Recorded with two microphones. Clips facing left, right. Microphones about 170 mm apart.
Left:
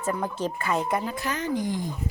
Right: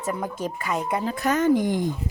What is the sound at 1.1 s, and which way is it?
Speech, 50° right (ahead or behind).